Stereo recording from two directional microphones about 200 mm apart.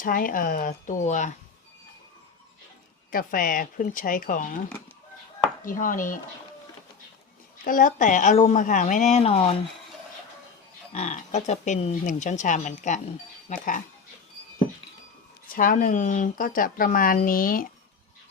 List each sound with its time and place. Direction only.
0.0 s speech: 45° left (ahead or behind)
3.1 s speech: 45° left (ahead or behind)
5.6 s speech: 40° left (ahead or behind)
7.6 s speech: 40° left (ahead or behind)
10.9 s speech: 35° left (ahead or behind)
15.4 s speech: 45° left (ahead or behind)